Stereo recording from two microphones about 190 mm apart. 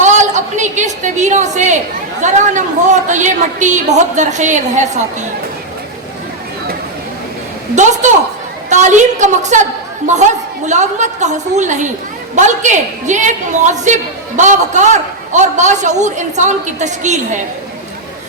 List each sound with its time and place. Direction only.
0.0 s a sound: 40° right (ahead or behind)
2.2 s a woman's voice: 40° right (ahead or behind)
7.8 s a woman's voice: 40° right (ahead or behind)